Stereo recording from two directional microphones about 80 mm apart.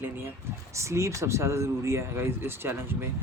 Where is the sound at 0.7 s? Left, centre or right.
Right.